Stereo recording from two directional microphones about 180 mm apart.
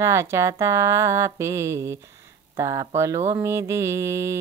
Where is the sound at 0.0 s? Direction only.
15° right (ahead or behind).